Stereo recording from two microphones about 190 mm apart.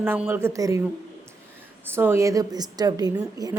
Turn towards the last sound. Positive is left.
turn(degrees=-20)  # may be behind; listen again after turning